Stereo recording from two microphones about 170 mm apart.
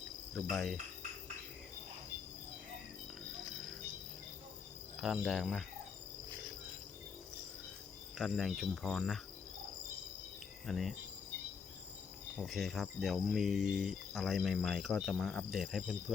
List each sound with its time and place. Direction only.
0.5 s cricket: centre (ahead or behind)
4.9 s cricket: centre (ahead or behind)
8.2 s cricket: centre (ahead or behind)
10.7 s cricket: centre (ahead or behind)
12.4 s cricket: centre (ahead or behind)